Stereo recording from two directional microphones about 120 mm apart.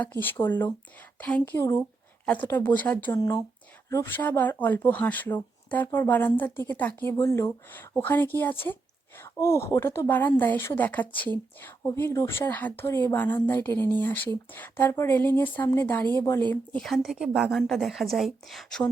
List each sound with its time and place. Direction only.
0.0 s speech: 15° left (ahead or behind)
3.2 s speech: 30° left (ahead or behind)
3.8 s speech: 20° left (ahead or behind)
16.5 s a woman's voice: 5° left (ahead or behind)